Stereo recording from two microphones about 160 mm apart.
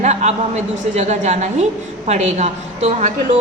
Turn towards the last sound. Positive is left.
turn(degrees=-45)  # may be behind; listen again after turning